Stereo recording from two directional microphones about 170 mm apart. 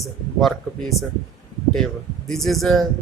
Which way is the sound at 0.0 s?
Centre (ahead or behind).